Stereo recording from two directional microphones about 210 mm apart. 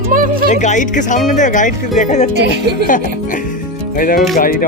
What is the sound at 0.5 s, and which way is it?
Speech, 35° left (ahead or behind).